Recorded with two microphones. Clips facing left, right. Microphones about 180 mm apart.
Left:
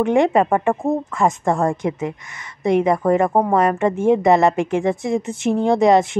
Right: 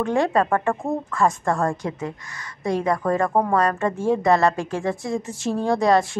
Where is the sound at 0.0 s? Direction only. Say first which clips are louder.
Left 5 dB; 20° left (ahead or behind).